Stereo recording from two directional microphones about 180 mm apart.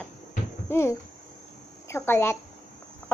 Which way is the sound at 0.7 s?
15° left (ahead or behind).